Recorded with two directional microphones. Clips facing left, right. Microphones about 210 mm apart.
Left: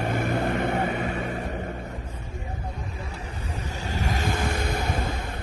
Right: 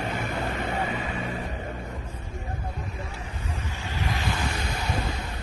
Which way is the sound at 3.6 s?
40° left (ahead or behind).